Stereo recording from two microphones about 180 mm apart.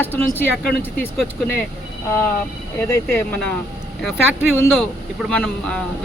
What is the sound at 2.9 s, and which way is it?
Speech, 10° left (ahead or behind).